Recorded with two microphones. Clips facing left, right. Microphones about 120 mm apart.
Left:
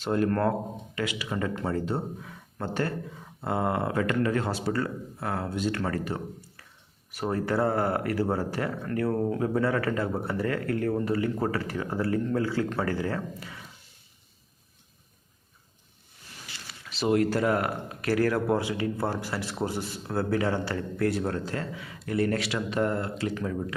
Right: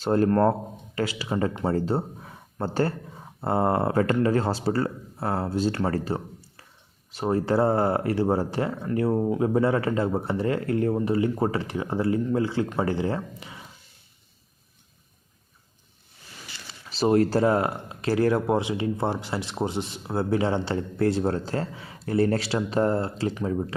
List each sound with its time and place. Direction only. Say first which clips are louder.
0.0 s speech: right 5 dB; 35° right (ahead or behind)
16.8 s speech: right 3 dB; 35° right (ahead or behind)